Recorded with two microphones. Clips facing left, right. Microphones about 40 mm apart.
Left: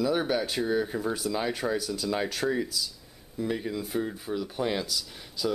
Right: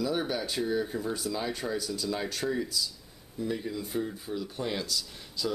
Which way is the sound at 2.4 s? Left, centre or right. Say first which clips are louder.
Left 2 dB; left.